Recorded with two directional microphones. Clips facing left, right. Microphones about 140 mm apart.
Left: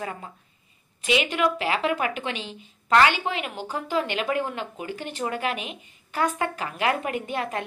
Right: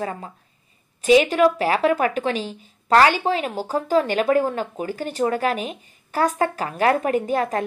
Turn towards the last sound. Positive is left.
turn(degrees=-40)  # may be behind; listen again after turning